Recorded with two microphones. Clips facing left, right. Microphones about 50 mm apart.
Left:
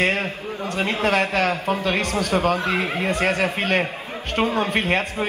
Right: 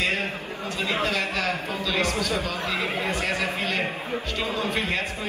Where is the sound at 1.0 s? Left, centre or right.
Left.